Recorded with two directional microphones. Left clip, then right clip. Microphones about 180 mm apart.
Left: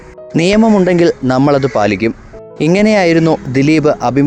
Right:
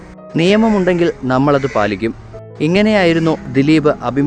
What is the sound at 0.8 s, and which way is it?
Speech, 30° left (ahead or behind).